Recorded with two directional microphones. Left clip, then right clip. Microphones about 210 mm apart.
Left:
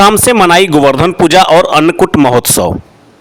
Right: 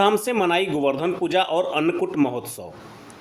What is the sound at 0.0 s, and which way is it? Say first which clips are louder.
A man's voice: left 13 dB; 55° left (ahead or behind).